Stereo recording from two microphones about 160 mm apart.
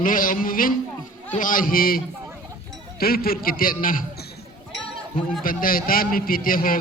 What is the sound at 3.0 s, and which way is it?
A man's voice, 70° left (ahead or behind).